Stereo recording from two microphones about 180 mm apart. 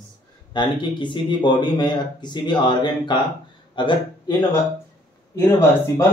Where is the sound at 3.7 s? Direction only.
25° left (ahead or behind).